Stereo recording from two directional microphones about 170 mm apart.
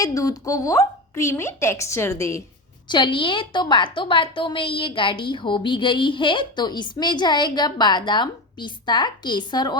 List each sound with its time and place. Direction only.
0.0 s a woman's voice: 20° left (ahead or behind)
2.9 s a woman's voice: 30° left (ahead or behind)